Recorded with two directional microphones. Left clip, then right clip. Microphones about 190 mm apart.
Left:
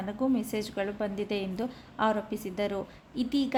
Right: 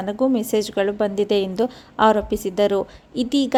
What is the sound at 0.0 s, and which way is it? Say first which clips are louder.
A woman's voice: right 10 dB; 35° right (ahead or behind).